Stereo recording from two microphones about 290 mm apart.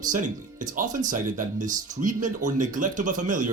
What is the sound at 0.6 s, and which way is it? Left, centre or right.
Speech, right.